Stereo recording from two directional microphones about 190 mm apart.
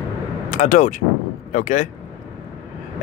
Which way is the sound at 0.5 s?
40° left (ahead or behind).